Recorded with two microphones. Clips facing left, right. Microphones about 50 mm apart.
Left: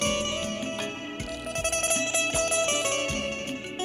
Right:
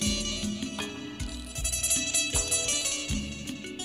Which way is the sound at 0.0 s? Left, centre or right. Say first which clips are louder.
Left 4 dB; left.